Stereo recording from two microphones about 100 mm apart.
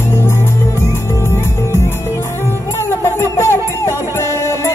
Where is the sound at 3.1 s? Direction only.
25° left (ahead or behind).